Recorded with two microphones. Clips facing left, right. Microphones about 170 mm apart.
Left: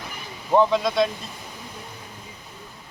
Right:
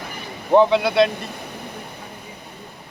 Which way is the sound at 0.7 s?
70° right (ahead or behind).